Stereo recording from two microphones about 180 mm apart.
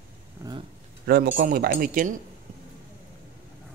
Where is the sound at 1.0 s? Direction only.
70° right (ahead or behind).